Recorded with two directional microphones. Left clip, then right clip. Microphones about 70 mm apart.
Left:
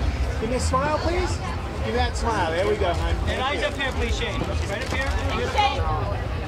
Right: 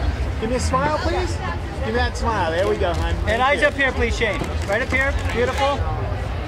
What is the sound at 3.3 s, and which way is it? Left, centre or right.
Speech, right.